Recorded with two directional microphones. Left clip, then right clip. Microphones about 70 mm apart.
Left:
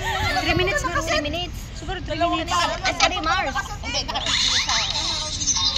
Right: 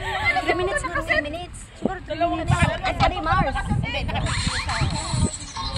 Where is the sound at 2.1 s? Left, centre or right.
Right.